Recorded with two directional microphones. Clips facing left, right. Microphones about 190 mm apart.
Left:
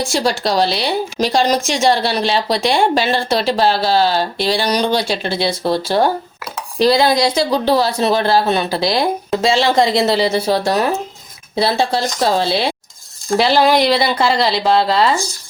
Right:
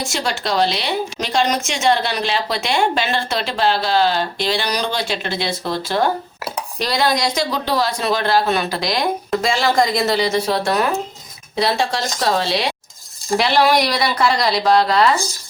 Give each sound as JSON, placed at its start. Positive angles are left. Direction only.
{"t": 0.1, "sound": "a woman's voice", "side_deg": 35}